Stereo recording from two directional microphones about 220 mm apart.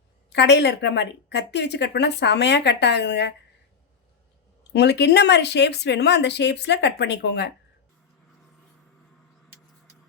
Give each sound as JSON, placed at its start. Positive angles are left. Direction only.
{"t": 0.3, "sound": "a woman's voice", "side_deg": 50}
{"t": 4.7, "sound": "a woman's voice", "side_deg": 50}